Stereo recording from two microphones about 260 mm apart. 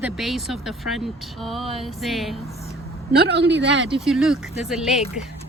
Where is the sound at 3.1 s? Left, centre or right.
Right.